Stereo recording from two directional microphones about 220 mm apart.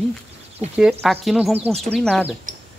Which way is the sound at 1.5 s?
25° right (ahead or behind).